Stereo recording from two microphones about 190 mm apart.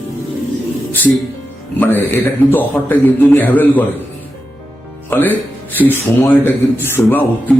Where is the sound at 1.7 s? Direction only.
10° left (ahead or behind).